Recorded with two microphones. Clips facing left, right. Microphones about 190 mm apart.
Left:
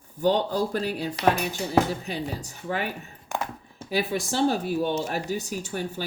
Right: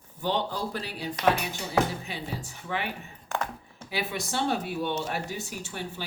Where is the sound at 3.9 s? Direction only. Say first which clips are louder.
Left 5 dB; 40° left (ahead or behind).